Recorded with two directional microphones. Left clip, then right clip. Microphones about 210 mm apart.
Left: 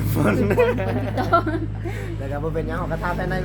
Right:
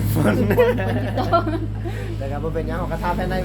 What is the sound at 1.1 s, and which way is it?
Speech, centre (ahead or behind).